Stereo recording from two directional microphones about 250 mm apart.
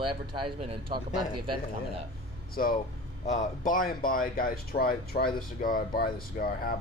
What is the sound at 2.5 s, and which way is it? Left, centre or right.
Speech, left.